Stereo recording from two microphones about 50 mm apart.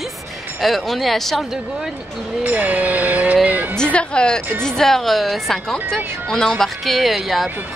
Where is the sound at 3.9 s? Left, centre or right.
Centre.